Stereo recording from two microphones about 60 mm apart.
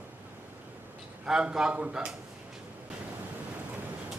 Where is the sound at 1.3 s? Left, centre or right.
Centre.